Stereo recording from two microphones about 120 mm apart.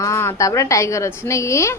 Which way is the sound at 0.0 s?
25° left (ahead or behind).